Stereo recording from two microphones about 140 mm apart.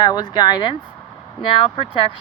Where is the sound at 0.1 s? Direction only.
30° left (ahead or behind).